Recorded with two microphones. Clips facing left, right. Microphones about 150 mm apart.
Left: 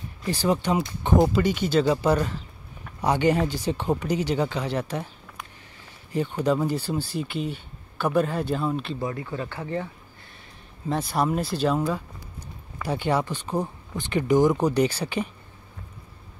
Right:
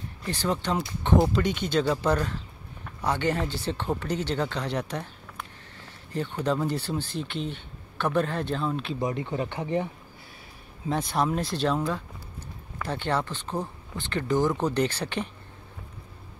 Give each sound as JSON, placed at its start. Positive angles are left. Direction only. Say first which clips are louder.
{"t": 0.3, "sound": "speech", "louder": "left 4 dB", "side_deg": 10}
{"t": 9.0, "sound": "speech", "louder": "right 1 dB", "side_deg": -20}
{"t": 10.9, "sound": "speech", "louder": "left 2 dB", "side_deg": 5}